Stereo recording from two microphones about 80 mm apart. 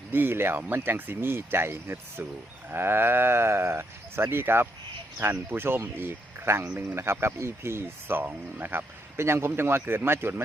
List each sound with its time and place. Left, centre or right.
0.1 s speech: right